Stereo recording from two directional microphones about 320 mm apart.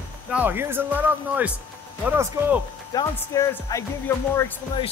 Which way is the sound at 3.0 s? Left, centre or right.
Centre.